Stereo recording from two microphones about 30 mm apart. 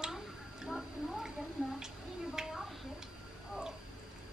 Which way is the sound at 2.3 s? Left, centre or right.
Centre.